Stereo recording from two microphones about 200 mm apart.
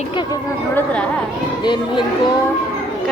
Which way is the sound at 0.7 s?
5° left (ahead or behind).